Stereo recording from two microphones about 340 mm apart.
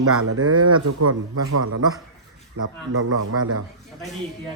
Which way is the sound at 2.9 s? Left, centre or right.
Right.